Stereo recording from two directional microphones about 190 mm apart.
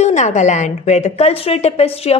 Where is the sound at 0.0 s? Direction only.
40° left (ahead or behind).